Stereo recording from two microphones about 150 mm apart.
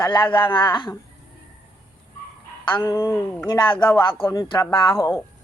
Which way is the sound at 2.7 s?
15° left (ahead or behind).